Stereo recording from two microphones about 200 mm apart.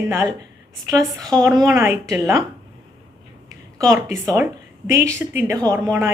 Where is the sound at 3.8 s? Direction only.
15° right (ahead or behind).